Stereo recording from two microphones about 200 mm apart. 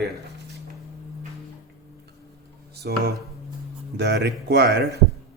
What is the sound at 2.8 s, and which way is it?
Speech, 55° right (ahead or behind).